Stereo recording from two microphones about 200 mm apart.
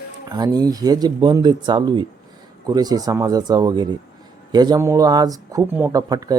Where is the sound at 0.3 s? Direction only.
20° right (ahead or behind).